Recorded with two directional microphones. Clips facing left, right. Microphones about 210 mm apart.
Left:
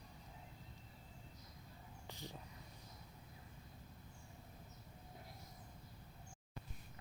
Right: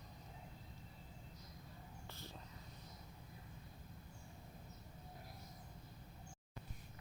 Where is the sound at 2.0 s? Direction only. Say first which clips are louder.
Left 5 dB; 15° left (ahead or behind).